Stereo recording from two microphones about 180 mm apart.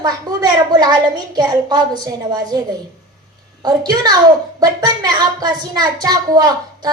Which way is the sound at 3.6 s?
20° right (ahead or behind).